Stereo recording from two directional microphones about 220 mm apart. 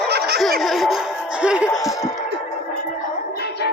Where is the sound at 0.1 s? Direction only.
50° right (ahead or behind).